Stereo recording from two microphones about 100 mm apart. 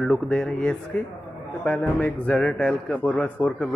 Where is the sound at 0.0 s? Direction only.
5° left (ahead or behind).